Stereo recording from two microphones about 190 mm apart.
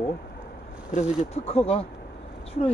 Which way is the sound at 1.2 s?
30° left (ahead or behind).